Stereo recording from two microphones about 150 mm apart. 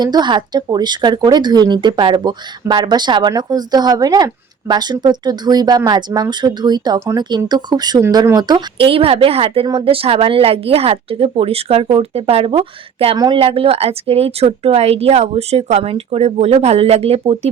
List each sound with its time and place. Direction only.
0.0 s a woman's voice: 30° right (ahead or behind)
13.1 s speech: 30° right (ahead or behind)
13.4 s speech: 40° right (ahead or behind)